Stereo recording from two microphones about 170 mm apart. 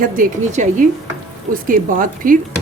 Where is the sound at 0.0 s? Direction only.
50° right (ahead or behind).